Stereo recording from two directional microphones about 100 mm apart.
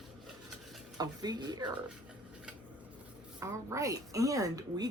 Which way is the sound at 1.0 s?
45° right (ahead or behind).